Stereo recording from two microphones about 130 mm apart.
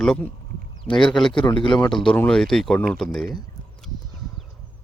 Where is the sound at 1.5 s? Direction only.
40° left (ahead or behind).